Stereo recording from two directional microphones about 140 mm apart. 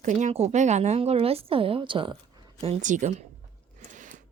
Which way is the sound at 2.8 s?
65° right (ahead or behind).